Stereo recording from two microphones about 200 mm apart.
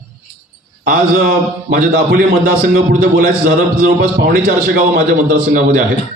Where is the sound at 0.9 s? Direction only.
45° right (ahead or behind).